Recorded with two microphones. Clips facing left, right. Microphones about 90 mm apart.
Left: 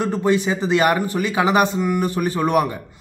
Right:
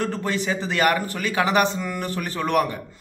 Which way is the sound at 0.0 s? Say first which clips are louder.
Left 6 dB; 20° left (ahead or behind).